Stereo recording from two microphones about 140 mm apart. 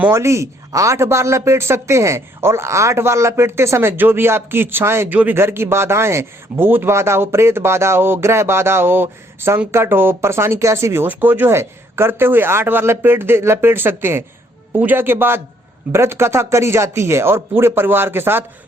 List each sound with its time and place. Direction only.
0.0 s speech: 20° right (ahead or behind)